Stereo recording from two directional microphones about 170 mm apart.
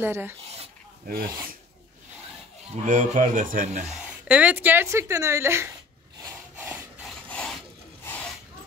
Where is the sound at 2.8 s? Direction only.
50° right (ahead or behind).